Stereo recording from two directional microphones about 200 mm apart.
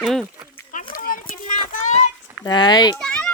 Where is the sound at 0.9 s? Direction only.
45° left (ahead or behind).